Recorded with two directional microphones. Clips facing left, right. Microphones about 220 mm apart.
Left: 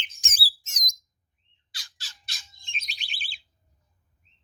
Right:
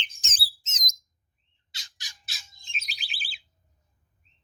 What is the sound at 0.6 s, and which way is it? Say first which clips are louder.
Bird: right 1 dB; 20° right (ahead or behind).